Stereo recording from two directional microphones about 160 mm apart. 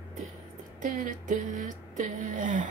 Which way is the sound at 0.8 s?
55° right (ahead or behind).